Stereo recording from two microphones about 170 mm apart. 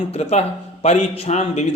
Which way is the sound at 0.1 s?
35° left (ahead or behind).